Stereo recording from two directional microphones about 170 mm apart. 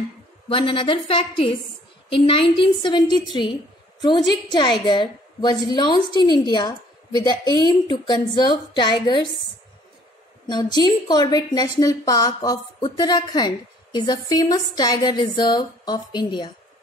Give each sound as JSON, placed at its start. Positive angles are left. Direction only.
{"t": 0.5, "sound": "a woman's voice", "side_deg": 30}
{"t": 10.4, "sound": "a woman's voice", "side_deg": 25}